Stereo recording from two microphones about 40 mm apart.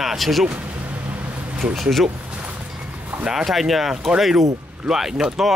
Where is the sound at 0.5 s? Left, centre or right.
Right.